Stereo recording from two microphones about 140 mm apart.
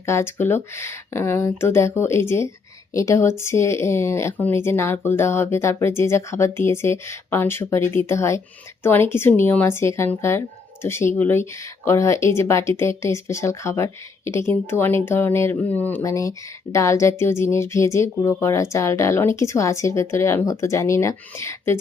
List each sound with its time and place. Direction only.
0.0 s speech: 20° left (ahead or behind)